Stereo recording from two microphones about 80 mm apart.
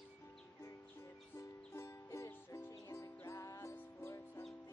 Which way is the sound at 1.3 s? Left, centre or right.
Left.